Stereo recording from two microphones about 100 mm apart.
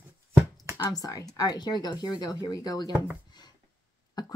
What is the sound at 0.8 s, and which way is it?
Speech, 40° left (ahead or behind).